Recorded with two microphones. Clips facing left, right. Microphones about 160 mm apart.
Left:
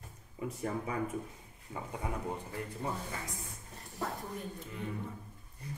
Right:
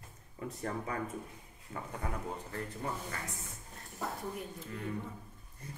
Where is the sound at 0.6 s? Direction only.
10° left (ahead or behind).